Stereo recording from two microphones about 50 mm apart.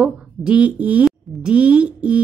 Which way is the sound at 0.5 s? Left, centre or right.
Right.